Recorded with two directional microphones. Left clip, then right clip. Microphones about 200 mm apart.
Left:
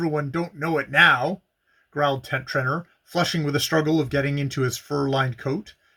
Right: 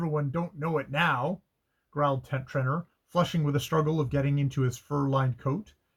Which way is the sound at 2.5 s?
15° left (ahead or behind).